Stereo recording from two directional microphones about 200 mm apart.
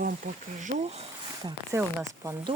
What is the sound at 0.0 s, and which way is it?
Speech, 40° right (ahead or behind).